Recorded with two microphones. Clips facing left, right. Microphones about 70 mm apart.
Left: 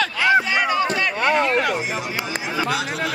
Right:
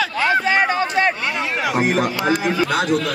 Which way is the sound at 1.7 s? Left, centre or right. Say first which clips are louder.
Right 7 dB; right.